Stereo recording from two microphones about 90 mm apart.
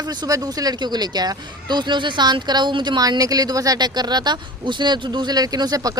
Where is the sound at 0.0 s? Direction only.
50° right (ahead or behind).